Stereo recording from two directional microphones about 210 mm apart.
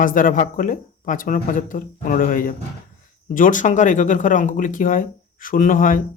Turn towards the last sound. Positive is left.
turn(degrees=40)  # may be behind; listen again after turning